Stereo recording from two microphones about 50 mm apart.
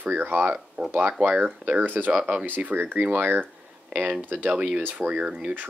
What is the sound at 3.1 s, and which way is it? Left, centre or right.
Speech, right.